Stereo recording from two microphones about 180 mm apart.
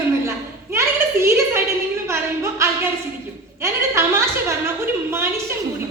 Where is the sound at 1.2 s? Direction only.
15° right (ahead or behind).